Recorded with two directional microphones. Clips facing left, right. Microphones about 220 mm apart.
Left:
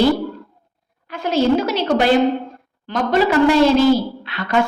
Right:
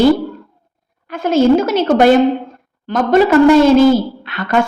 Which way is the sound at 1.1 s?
50° right (ahead or behind).